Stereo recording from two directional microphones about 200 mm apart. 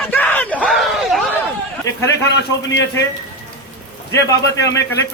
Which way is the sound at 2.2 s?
60° left (ahead or behind).